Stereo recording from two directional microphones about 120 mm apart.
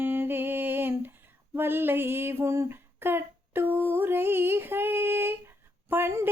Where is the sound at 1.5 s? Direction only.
20° right (ahead or behind).